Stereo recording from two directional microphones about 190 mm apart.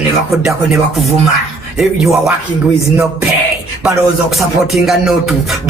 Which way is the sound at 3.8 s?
Centre (ahead or behind).